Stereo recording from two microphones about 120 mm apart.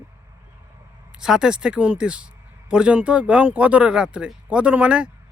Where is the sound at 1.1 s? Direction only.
5° right (ahead or behind).